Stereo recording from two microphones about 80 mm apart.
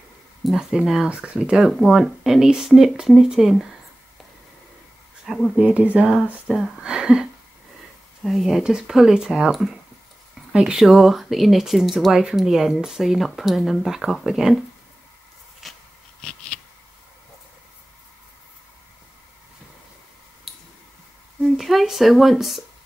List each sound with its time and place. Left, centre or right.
0.4 s speech: centre
5.3 s speech: centre
5.6 s speech: centre
6.4 s speech: centre
15.6 s a sound: centre
21.5 s speech: centre